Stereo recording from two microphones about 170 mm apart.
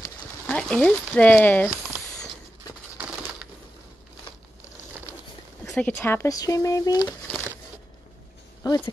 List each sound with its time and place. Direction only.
0.5 s speech: 5° left (ahead or behind)
5.8 s speech: 10° left (ahead or behind)
8.6 s speech: 25° left (ahead or behind)